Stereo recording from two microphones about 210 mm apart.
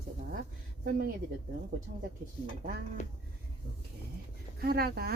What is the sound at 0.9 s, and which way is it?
Speech, 45° right (ahead or behind).